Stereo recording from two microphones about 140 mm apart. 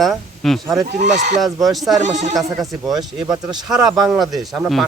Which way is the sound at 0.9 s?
55° right (ahead or behind).